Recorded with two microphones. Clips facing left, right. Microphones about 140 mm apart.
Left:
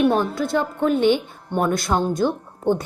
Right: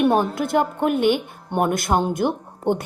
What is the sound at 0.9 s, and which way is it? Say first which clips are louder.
A woman's voice: left 1 dB; 50° right (ahead or behind).